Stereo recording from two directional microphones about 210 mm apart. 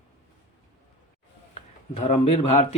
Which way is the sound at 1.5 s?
30° left (ahead or behind).